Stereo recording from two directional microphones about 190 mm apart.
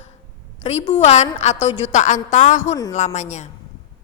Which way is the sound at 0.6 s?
35° left (ahead or behind).